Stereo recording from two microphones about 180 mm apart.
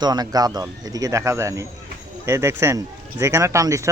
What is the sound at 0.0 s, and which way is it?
Speech, 20° right (ahead or behind).